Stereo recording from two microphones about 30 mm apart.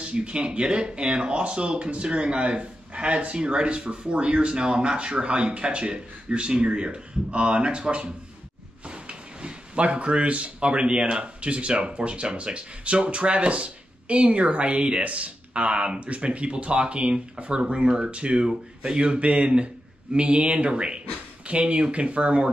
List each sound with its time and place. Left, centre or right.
0.0 s speech: right
3.3 s speech: right
8.8 s drawer open or close: right
10.7 s speech: right
15.0 s speech: right
15.5 s speech: right